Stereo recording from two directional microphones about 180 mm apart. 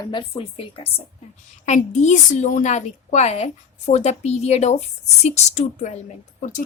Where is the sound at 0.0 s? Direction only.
25° left (ahead or behind).